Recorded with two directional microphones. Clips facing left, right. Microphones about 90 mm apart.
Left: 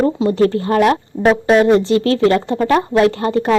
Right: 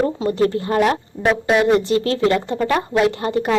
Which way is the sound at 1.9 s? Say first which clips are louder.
Left 4 dB; 30° right (ahead or behind).